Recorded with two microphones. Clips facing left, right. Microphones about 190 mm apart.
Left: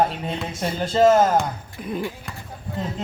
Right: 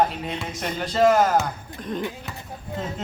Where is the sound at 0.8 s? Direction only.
25° left (ahead or behind).